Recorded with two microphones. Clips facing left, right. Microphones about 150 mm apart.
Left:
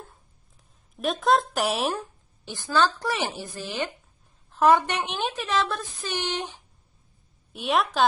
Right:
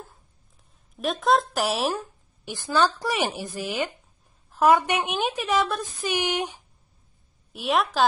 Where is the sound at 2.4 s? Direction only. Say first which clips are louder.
Right 1 dB; 20° right (ahead or behind).